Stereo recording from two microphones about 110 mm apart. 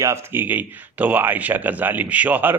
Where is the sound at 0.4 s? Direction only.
15° right (ahead or behind).